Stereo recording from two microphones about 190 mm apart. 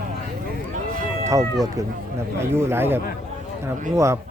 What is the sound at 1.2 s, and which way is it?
Cat, 15° right (ahead or behind).